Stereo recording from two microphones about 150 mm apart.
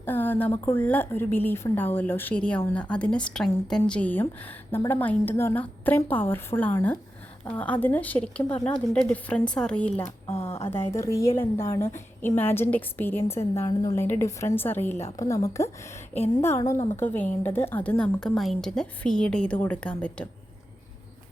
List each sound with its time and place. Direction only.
0.0 s a woman's voice: 15° left (ahead or behind)
10.2 s speech: 45° left (ahead or behind)
10.7 s a woman's voice: 20° left (ahead or behind)